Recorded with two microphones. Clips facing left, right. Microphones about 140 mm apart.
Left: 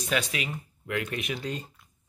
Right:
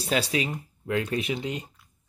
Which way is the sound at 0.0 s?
30° right (ahead or behind).